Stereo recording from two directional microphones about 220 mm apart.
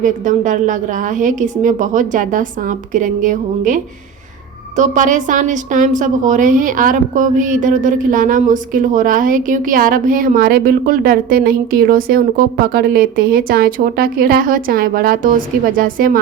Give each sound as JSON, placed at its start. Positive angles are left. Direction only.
{"t": 0.0, "sound": "a woman's voice", "side_deg": -35}
{"t": 4.8, "sound": "a woman's voice", "side_deg": -35}